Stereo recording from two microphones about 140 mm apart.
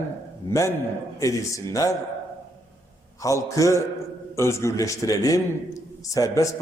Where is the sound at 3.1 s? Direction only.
25° left (ahead or behind).